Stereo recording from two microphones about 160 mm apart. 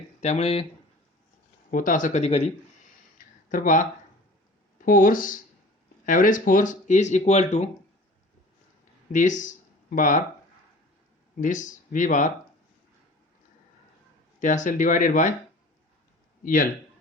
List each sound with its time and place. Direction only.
0.2 s speech: 45° left (ahead or behind)
1.7 s speech: 55° left (ahead or behind)
3.5 s speech: 55° left (ahead or behind)
9.1 s speech: 50° left (ahead or behind)
11.3 s speech: 50° left (ahead or behind)
14.3 s speech: 50° left (ahead or behind)
16.4 s speech: 60° left (ahead or behind)